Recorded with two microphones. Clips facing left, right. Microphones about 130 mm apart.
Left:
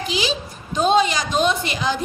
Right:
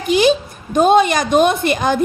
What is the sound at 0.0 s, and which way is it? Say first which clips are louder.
A woman's voice: right 10 dB; 55° right (ahead or behind).